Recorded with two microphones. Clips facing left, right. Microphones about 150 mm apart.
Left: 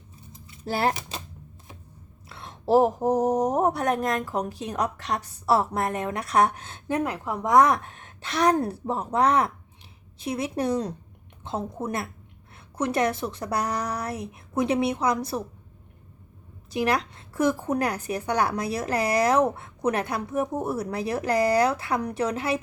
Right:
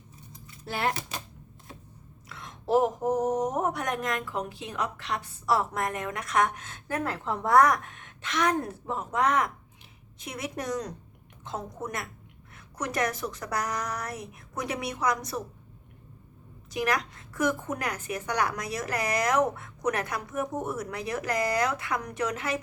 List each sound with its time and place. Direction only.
0.6 s speech: 35° left (ahead or behind)
2.3 s a woman's voice: 30° left (ahead or behind)
16.7 s speech: 30° left (ahead or behind)